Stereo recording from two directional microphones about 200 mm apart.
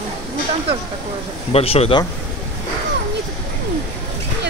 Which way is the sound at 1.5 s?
30° left (ahead or behind).